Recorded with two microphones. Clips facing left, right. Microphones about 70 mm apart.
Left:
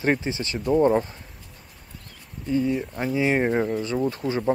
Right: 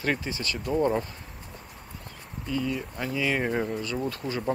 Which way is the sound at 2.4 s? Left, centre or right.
Left.